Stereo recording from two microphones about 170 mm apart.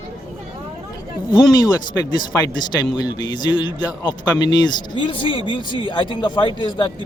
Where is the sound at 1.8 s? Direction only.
25° left (ahead or behind).